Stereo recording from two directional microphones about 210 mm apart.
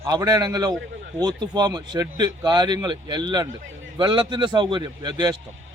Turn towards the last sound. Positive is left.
turn(degrees=-20)  # may be behind; listen again after turning